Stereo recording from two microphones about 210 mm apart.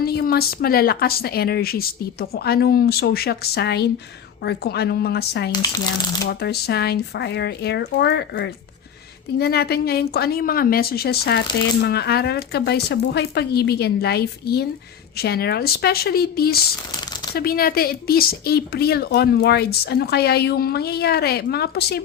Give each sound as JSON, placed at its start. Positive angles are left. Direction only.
{"t": 0.0, "sound": "speech", "side_deg": 45}